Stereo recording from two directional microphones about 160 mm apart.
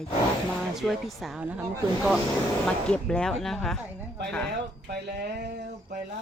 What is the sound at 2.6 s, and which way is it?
Speech, 5° left (ahead or behind).